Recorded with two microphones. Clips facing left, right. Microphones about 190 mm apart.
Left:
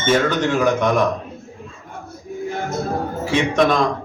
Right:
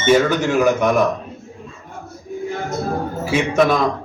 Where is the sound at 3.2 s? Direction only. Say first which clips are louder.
Right 1 dB; 5° right (ahead or behind).